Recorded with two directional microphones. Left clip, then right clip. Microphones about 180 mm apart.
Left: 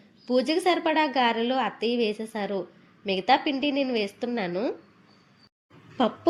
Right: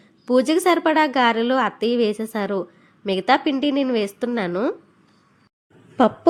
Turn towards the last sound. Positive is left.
turn(degrees=-30)  # may be behind; listen again after turning